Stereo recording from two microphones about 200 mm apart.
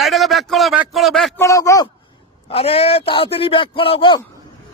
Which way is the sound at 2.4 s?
30° left (ahead or behind).